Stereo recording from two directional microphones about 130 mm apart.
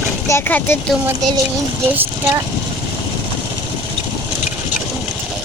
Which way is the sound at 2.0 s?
25° right (ahead or behind).